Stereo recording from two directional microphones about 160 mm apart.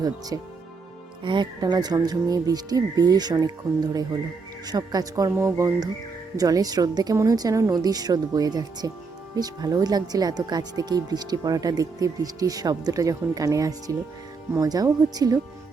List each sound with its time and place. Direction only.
0.3 s speech: 20° right (ahead or behind)